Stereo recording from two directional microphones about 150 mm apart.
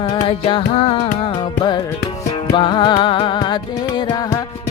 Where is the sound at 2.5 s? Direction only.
30° left (ahead or behind).